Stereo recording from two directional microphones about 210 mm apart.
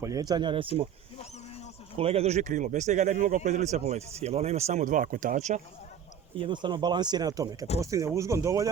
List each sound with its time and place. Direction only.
0.0 s speech: 15° right (ahead or behind)
2.0 s speech: 30° right (ahead or behind)
6.4 s speech: 20° right (ahead or behind)